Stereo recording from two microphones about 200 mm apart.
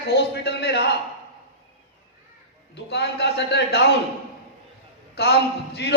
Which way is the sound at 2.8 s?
55° left (ahead or behind).